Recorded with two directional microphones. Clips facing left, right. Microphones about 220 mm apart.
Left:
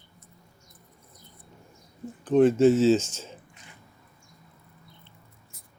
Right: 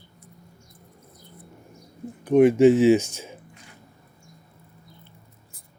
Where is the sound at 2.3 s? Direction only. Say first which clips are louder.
Right 3 dB; 10° right (ahead or behind).